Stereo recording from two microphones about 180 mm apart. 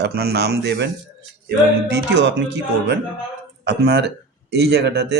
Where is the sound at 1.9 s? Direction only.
80° right.